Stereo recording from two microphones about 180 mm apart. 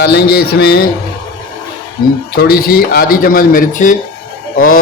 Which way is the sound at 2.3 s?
60° left (ahead or behind).